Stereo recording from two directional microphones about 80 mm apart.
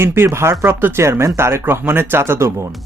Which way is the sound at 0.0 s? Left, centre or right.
Right.